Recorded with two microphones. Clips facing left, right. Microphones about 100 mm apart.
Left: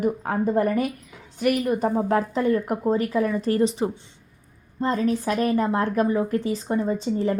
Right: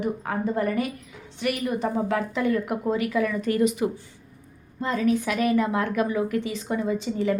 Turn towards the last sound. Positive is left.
turn(degrees=35)  # may be behind; listen again after turning